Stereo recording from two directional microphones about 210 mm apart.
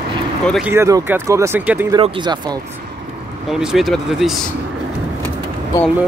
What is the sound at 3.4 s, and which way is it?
Speech, centre (ahead or behind).